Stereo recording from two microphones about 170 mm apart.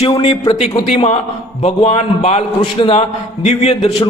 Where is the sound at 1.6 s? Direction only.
40° left (ahead or behind).